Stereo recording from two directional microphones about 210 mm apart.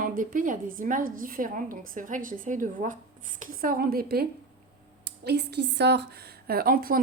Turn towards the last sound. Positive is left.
turn(degrees=-45)  # may be behind; listen again after turning